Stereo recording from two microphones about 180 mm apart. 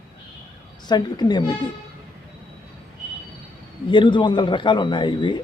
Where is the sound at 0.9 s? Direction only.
25° left (ahead or behind).